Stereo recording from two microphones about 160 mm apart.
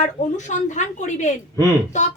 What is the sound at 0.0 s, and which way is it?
Speech, 50° left (ahead or behind).